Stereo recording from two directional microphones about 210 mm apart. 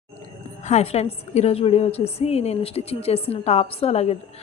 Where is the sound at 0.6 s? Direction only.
30° left (ahead or behind).